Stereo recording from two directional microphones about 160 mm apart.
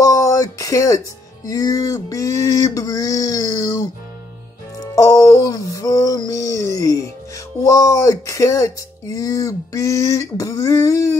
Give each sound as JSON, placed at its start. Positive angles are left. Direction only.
{"t": 0.0, "sound": "speech", "side_deg": 20}